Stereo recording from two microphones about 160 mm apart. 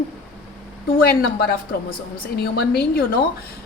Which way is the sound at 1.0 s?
70° left (ahead or behind).